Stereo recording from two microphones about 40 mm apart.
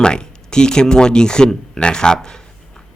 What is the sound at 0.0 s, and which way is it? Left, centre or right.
Speech, left.